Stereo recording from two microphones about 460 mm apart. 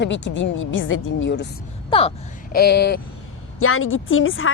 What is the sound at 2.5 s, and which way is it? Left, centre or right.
Speech, left.